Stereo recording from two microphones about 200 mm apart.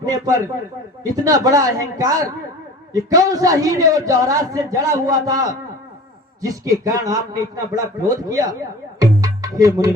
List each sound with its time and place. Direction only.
0.0 s a man's voice: 20° right (ahead or behind)